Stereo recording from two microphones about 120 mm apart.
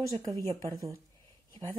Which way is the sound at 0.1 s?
30° right (ahead or behind).